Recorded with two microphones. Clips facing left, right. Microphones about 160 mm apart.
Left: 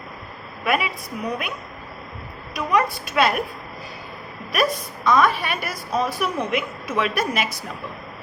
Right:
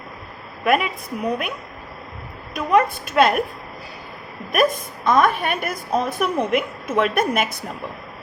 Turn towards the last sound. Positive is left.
turn(degrees=-55)  # may be behind; listen again after turning